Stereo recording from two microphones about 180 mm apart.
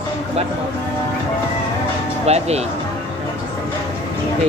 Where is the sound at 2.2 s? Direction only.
35° right (ahead or behind).